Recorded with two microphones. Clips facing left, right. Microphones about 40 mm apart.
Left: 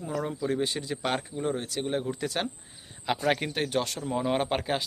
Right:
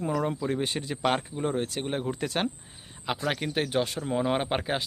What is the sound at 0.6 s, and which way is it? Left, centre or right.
Speech, right.